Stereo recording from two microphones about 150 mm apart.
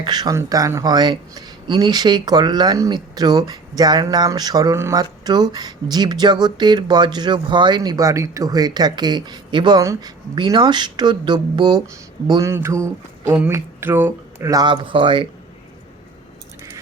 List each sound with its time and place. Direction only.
0.0 s speech: 25° right (ahead or behind)
12.3 s speech: 20° right (ahead or behind); by 15.3 s 35° right (ahead or behind)